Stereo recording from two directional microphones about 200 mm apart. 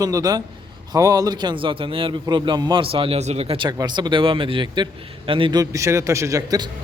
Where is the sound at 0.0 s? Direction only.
20° right (ahead or behind).